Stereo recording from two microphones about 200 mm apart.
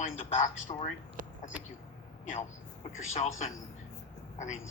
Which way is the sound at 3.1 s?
35° left (ahead or behind).